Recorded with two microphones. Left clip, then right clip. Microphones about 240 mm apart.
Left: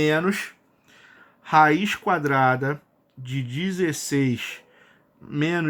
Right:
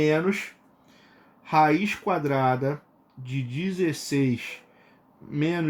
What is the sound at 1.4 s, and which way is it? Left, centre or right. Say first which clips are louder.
Speech: left 3 dB; left.